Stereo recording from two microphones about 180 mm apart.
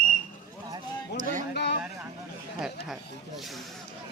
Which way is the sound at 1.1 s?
45° right (ahead or behind).